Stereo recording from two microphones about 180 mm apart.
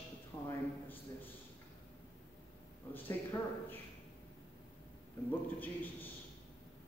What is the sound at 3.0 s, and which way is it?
Speech, 10° left (ahead or behind).